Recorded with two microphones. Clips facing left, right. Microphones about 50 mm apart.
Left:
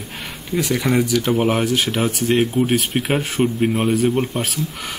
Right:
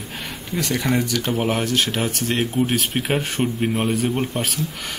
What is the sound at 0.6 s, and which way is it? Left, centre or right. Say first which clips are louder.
Speech: left 3 dB; centre.